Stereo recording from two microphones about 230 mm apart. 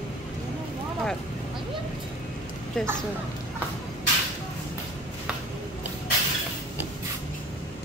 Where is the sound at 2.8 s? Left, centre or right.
Centre.